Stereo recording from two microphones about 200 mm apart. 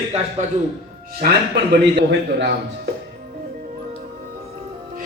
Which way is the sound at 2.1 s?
60° right (ahead or behind).